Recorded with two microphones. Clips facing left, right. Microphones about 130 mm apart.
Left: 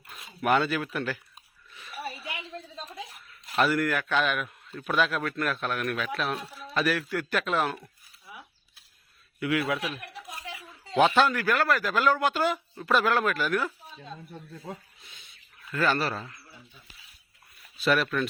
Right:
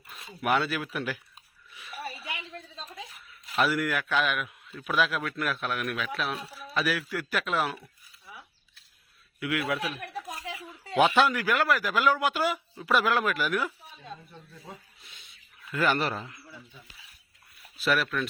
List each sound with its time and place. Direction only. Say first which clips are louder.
0.1 s a man's voice: left 2 dB; centre (ahead or behind)
2.2 s a sound: left 1 dB; 25° left (ahead or behind)
3.4 s a man's voice: left 2 dB; centre (ahead or behind)
9.4 s a man's voice: left 2 dB; centre (ahead or behind)
11.2 s speech: left 1 dB; 10° right (ahead or behind)
15.7 s speech: even; 15° right (ahead or behind)
17.7 s a man's voice: left 2 dB; 5° right (ahead or behind)